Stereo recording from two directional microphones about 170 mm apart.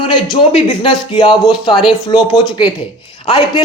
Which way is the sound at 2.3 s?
30° left (ahead or behind).